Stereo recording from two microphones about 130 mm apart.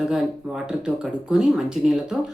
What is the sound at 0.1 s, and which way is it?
Speech, 5° right (ahead or behind).